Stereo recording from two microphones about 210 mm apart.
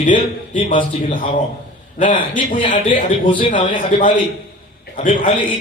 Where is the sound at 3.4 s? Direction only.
25° left (ahead or behind).